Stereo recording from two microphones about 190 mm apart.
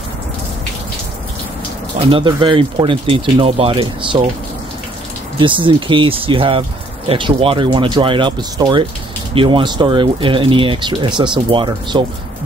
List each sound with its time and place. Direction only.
2.0 s speech: 30° right (ahead or behind)
5.4 s speech: 25° right (ahead or behind)